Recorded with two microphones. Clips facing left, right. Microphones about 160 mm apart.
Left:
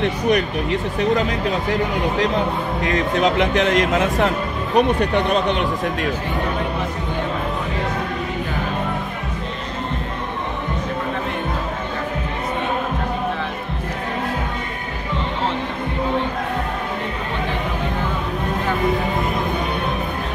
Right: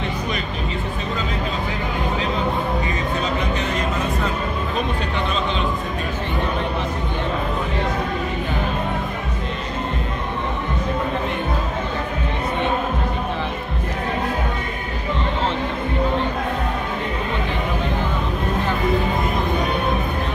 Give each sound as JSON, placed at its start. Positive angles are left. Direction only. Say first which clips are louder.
{"t": 0.0, "sound": "speech", "louder": "left 7 dB", "side_deg": 70}
{"t": 2.8, "sound": "speech", "louder": "left 5 dB", "side_deg": 90}
{"t": 4.7, "sound": "speech", "louder": "left 11 dB", "side_deg": 70}